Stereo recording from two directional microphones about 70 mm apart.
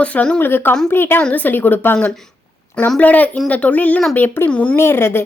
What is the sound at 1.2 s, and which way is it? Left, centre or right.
Speech, left.